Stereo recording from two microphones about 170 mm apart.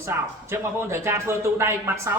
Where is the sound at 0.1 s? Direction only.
10° right (ahead or behind).